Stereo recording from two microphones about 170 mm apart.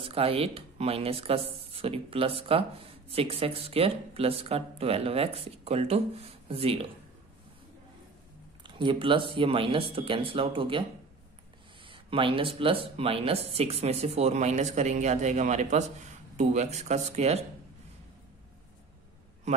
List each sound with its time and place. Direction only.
0.0 s speech: 35° right (ahead or behind)
8.6 s speech: 30° right (ahead or behind)